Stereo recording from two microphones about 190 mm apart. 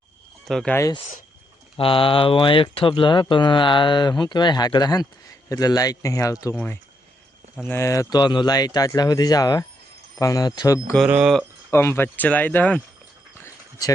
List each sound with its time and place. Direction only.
0.4 s speech: 5° left (ahead or behind)
0.8 s speech: 20° left (ahead or behind)
10.9 s speech: 5° right (ahead or behind)
11.7 s speech: 15° left (ahead or behind)
13.4 s dog: 20° left (ahead or behind)